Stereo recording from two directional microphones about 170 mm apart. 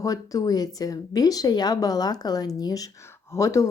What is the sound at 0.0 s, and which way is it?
Speech, 20° left (ahead or behind).